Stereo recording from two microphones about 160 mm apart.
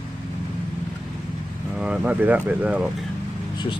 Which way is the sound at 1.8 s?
10° right (ahead or behind).